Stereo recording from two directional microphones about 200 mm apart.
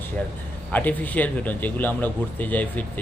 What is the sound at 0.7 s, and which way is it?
Speech, 10° left (ahead or behind).